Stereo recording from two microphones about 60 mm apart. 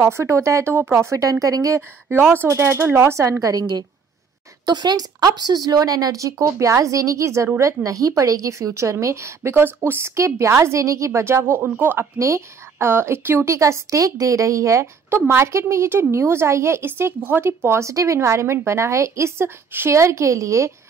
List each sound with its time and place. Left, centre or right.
0.0 s a woman's voice: right
1.1 s a woman's voice: right
2.3 s a woman's voice: right
12.2 s a woman's voice: right
13.5 s a woman's voice: right
15.0 s a woman's voice: right
19.9 s a woman's voice: right